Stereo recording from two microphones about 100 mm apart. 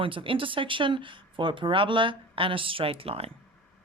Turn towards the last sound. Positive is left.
turn(degrees=-75)  # may be behind; listen again after turning